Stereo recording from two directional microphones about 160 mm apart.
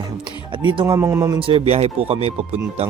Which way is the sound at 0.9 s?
20° right (ahead or behind).